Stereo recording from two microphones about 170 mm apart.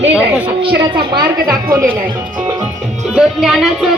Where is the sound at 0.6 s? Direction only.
30° right (ahead or behind).